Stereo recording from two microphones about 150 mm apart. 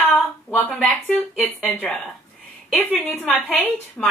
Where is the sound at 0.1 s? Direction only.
10° left (ahead or behind).